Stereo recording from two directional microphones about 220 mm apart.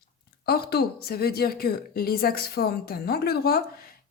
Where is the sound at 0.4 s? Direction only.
45° left (ahead or behind).